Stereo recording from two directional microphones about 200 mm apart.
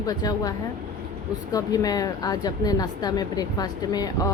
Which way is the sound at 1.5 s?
20° left (ahead or behind).